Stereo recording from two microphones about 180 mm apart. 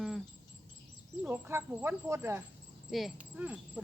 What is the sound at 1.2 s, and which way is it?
Speech, 10° right (ahead or behind).